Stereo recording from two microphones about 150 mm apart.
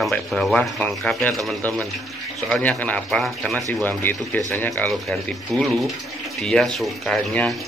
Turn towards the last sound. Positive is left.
turn(degrees=5)  # may be behind; listen again after turning